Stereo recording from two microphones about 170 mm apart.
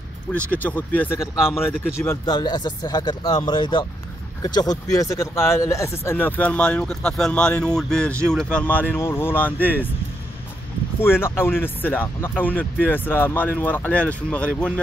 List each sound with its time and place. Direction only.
0.5 s speech: 10° left (ahead or behind)
11.0 s speech: 15° left (ahead or behind)